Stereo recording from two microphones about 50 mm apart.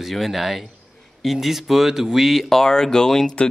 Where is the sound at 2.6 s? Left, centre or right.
Centre.